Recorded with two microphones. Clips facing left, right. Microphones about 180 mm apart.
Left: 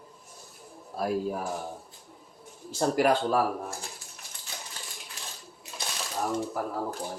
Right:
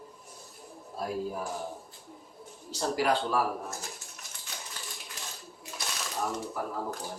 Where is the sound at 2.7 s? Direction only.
50° left (ahead or behind).